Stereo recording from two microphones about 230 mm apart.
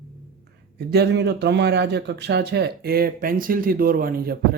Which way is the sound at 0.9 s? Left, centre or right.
Right.